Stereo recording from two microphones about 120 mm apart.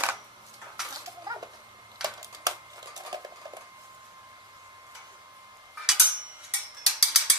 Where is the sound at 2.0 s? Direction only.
30° right (ahead or behind).